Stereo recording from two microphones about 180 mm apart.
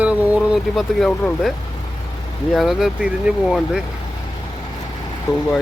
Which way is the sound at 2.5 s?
Centre (ahead or behind).